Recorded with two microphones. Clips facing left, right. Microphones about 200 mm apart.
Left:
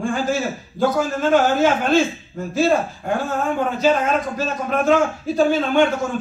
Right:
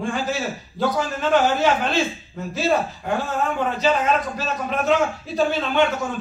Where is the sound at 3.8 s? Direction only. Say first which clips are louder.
Left 2 dB; 50° left (ahead or behind).